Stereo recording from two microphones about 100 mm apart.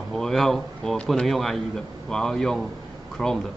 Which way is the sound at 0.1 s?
5° left (ahead or behind).